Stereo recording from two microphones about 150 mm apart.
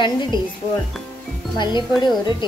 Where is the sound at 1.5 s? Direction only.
30° left (ahead or behind).